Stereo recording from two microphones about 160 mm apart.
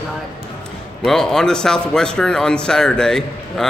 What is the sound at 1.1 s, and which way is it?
Speech, 5° left (ahead or behind).